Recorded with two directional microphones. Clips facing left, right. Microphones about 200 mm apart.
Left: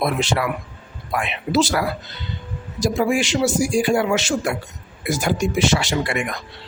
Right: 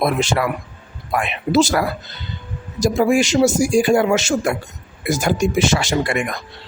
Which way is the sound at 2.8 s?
45° right (ahead or behind).